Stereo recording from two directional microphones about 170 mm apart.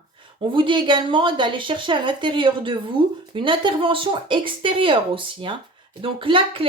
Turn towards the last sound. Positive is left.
turn(degrees=-30)  # may be behind; listen again after turning